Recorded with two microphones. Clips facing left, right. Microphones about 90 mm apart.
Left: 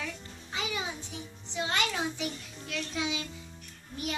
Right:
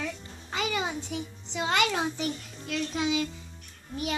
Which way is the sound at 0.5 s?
70° right (ahead or behind).